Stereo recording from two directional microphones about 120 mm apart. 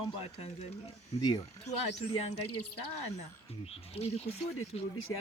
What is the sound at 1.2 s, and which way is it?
Speech, 35° left (ahead or behind).